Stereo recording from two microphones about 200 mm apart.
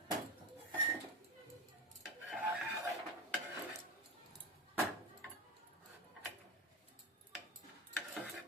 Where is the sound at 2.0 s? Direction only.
5° right (ahead or behind).